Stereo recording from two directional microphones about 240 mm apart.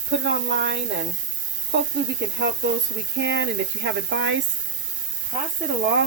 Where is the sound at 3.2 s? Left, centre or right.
Right.